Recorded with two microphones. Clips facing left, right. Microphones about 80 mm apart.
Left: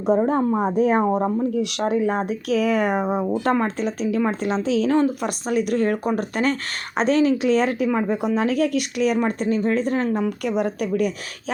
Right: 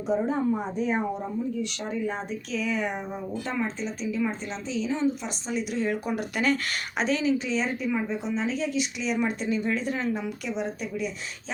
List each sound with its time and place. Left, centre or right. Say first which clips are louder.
0.3 s speech: left 6 dB; left